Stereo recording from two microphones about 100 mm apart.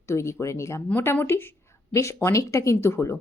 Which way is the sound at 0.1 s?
30° left (ahead or behind).